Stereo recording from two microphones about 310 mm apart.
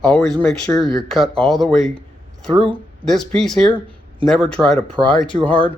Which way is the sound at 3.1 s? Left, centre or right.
Centre.